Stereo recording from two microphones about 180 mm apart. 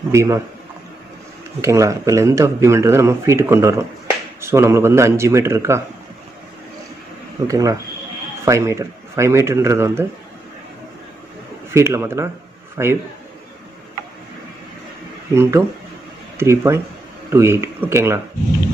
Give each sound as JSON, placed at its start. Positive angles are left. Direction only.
{"t": 0.1, "sound": "speech", "side_deg": -15}
{"t": 1.6, "sound": "speech", "side_deg": -15}
{"t": 7.4, "sound": "speech", "side_deg": -20}
{"t": 11.7, "sound": "speech", "side_deg": -15}
{"t": 15.3, "sound": "speech", "side_deg": -15}